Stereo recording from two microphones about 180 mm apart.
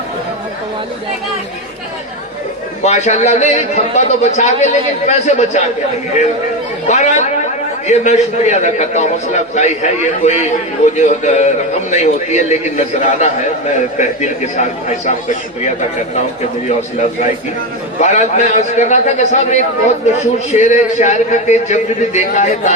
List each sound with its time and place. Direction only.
2.8 s a man's voice: 40° left (ahead or behind)
6.8 s a man's voice: 40° left (ahead or behind)
18.0 s a man's voice: 40° left (ahead or behind)